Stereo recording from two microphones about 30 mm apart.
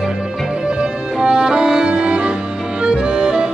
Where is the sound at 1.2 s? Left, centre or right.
Right.